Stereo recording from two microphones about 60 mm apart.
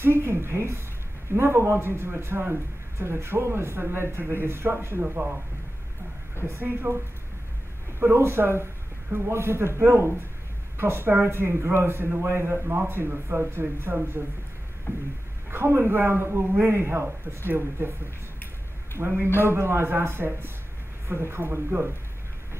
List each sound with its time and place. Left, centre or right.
0.0 s a woman's voice: right
3.0 s speech: right
5.0 s speech: centre
6.4 s a man's voice: right
8.0 s a man's voice: right
14.9 s a sound: left
15.5 s a man's voice: right
18.9 s a man's voice: right